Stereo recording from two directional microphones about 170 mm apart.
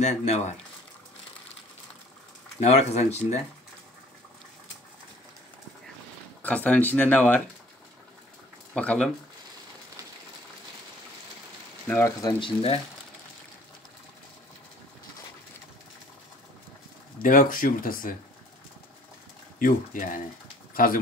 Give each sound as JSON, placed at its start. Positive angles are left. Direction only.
{"t": 0.0, "sound": "speech", "side_deg": 45}
{"t": 2.6, "sound": "speech", "side_deg": 40}
{"t": 6.4, "sound": "speech", "side_deg": 10}
{"t": 8.7, "sound": "speech", "side_deg": 5}
{"t": 11.9, "sound": "speech", "side_deg": 20}
{"t": 17.2, "sound": "speech", "side_deg": 55}
{"t": 19.6, "sound": "speech", "side_deg": 55}